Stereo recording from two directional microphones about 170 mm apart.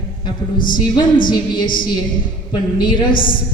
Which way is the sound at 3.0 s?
55° left (ahead or behind).